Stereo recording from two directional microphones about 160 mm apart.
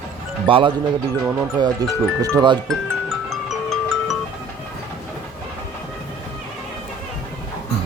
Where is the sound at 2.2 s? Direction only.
25° right (ahead or behind).